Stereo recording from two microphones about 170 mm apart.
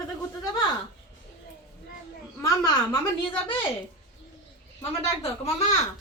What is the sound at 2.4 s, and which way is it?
Speech, 20° left (ahead or behind).